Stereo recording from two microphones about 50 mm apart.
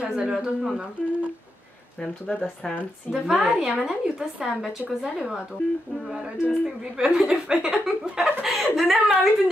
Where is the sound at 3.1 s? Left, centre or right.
Centre.